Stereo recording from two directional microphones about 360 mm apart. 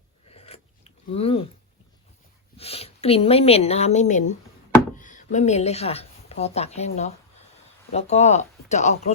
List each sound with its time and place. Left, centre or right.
0.3 s scissors: centre
2.6 s speech: centre